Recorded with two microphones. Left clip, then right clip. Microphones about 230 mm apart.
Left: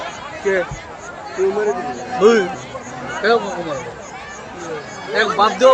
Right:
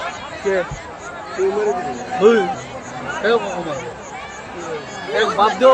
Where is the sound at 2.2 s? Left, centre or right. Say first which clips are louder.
Left 1 dB; left.